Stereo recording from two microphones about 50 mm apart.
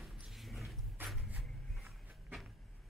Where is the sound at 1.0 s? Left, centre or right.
Right.